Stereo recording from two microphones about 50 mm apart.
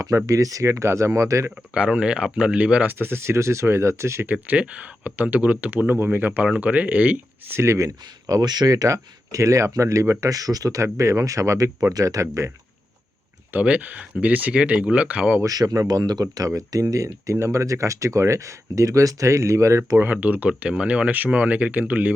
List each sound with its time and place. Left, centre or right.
0.3 s speech: right
1.5 s speech: right
2.8 s speech: right
4.5 s speech: right
5.9 s speech: right
7.5 s speech: right
8.9 s speech: right
13.5 s speech: right
15.4 s speech: right
20.0 s speech: right
20.5 s speech: right